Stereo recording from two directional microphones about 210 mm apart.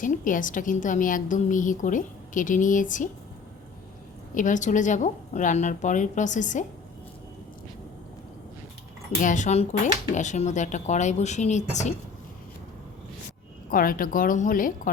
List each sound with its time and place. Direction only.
0.0 s a woman's voice: 40° left (ahead or behind)
4.4 s a woman's voice: 35° left (ahead or behind)
9.2 s a woman's voice: 35° left (ahead or behind)
13.7 s a woman's voice: 40° left (ahead or behind)